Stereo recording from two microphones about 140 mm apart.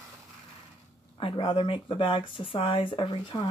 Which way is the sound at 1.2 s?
35° left (ahead or behind).